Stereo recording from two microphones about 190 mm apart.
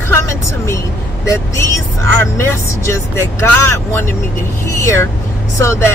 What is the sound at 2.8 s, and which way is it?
Speech, 15° left (ahead or behind).